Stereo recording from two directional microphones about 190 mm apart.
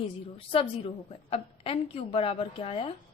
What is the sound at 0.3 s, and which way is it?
A woman's voice, 30° left (ahead or behind).